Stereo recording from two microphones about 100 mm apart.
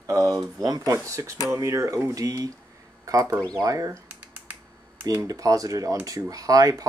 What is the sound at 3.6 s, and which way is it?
Speech, 35° right (ahead or behind).